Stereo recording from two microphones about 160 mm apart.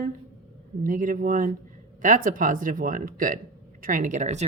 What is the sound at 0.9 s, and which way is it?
Speech, 55° right (ahead or behind).